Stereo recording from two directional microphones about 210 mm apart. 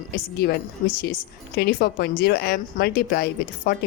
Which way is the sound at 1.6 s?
50° left (ahead or behind).